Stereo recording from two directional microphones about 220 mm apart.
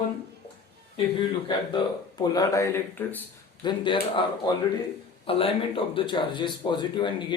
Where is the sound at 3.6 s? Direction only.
20° left (ahead or behind).